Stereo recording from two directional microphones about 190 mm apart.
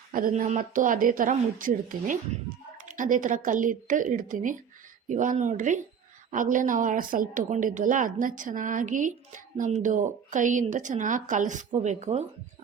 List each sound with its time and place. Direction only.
0.1 s a woman's voice: 45° right (ahead or behind)